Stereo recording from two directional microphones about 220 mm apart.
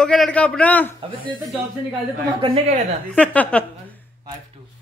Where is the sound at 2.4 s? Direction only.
25° right (ahead or behind).